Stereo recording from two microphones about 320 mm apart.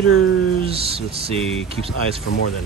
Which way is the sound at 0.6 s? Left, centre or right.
Centre.